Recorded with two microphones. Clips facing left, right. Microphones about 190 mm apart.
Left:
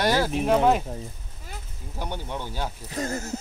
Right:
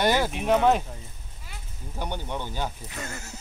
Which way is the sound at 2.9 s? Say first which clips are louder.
Left 9 dB; 35° left (ahead or behind).